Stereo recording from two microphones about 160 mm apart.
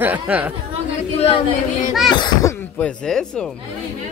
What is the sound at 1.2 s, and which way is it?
Speech, 35° left (ahead or behind).